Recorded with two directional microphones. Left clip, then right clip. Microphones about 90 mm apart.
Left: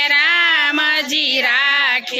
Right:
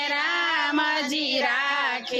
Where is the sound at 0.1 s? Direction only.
15° left (ahead or behind).